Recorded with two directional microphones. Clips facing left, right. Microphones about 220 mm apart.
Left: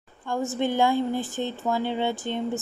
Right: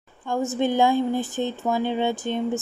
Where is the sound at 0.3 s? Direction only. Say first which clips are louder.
Right 3 dB; 15° right (ahead or behind).